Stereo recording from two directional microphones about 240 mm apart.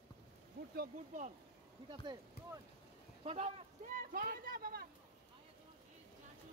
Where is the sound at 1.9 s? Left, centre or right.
Centre; by 4.9 s right.